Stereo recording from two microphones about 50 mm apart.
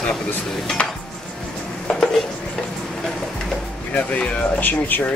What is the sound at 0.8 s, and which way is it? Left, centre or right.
Dishes, left.